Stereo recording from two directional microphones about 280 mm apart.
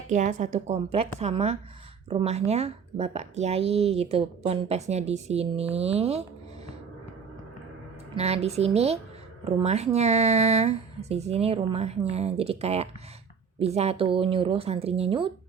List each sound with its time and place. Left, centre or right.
0.1 s a woman's voice: right
8.1 s a woman's voice: right